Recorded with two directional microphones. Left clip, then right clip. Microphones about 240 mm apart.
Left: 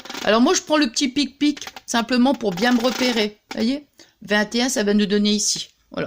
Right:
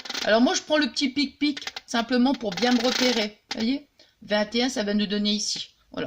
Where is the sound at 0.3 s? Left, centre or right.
Left.